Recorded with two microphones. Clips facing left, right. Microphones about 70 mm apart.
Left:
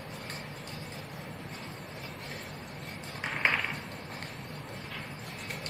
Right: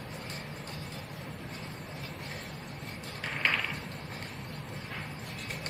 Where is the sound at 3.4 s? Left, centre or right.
Centre.